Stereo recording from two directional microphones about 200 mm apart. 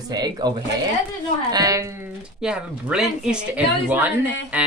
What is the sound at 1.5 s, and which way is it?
Speech, 15° right (ahead or behind).